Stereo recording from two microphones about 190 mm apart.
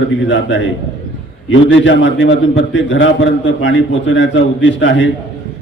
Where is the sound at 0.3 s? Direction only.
70° left (ahead or behind).